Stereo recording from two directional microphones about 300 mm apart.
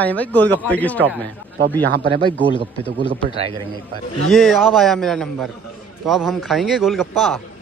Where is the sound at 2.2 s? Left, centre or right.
Centre.